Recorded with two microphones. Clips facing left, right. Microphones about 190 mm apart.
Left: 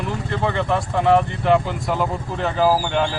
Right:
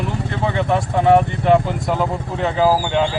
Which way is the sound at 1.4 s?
Centre (ahead or behind).